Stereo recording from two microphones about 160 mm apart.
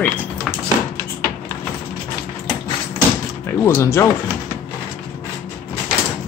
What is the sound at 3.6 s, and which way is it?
Speech, 15° left (ahead or behind).